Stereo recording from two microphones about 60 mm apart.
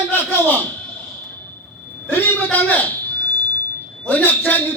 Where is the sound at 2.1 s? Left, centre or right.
Left.